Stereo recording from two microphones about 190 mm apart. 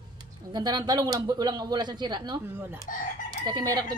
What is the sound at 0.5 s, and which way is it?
Speech, 20° right (ahead or behind).